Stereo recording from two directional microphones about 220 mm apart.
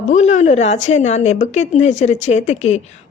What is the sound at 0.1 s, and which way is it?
Speech, 30° left (ahead or behind).